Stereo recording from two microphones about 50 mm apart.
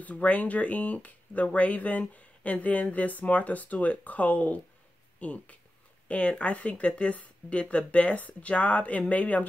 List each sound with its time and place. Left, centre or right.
0.0 s speech: left